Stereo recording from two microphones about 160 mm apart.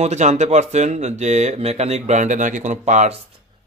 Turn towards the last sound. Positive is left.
turn(degrees=-45)  # may be behind; listen again after turning